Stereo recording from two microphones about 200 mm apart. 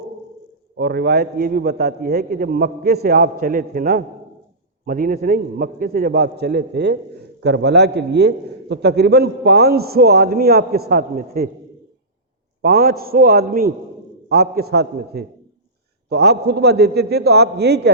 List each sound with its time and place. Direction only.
0.8 s a man's voice: 50° right (ahead or behind)
12.6 s a man's voice: 50° right (ahead or behind)